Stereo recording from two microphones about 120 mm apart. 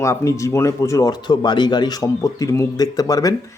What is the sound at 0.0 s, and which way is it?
Speech, 25° left (ahead or behind).